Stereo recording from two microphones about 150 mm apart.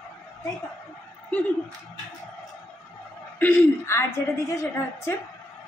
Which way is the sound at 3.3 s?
10° left (ahead or behind).